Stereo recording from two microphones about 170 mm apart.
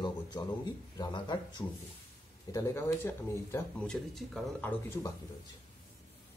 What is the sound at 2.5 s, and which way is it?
Speech, 15° left (ahead or behind).